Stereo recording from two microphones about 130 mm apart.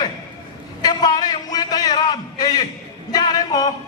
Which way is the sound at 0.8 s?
30° left (ahead or behind).